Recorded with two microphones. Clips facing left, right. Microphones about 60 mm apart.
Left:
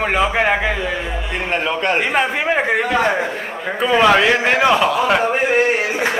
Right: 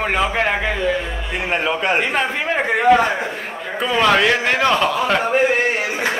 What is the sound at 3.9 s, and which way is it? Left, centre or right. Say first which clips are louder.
A man's voice: left 2 dB; centre.